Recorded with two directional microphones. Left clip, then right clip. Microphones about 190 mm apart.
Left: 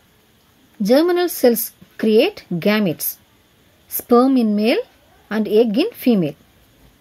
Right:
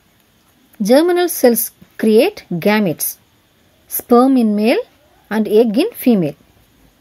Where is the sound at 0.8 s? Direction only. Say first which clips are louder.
Right 3 dB; 15° right (ahead or behind).